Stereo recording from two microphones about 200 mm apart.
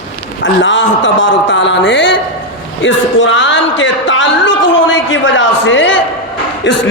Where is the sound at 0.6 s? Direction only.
70° left (ahead or behind).